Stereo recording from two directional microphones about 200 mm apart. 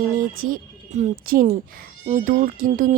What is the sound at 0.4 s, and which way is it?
Speech, 40° right (ahead or behind).